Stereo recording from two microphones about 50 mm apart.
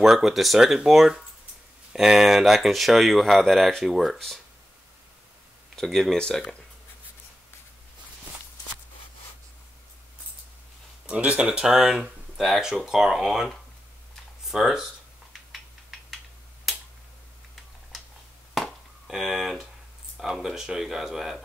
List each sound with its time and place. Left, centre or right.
0.0 s speech: centre
5.8 s speech: centre
11.1 s speech: right
11.7 s speech: centre
15.5 s a sound: centre
18.5 s chop: centre
19.0 s speech: centre